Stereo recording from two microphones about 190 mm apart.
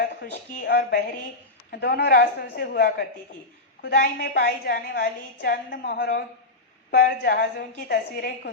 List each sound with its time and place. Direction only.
0.2 s a woman's voice: 55° left (ahead or behind)